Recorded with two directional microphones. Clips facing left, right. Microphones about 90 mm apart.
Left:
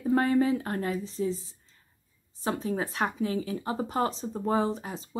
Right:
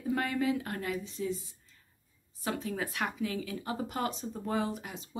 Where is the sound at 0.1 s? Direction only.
35° left (ahead or behind).